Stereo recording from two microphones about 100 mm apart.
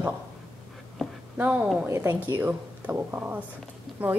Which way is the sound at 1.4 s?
20° right (ahead or behind).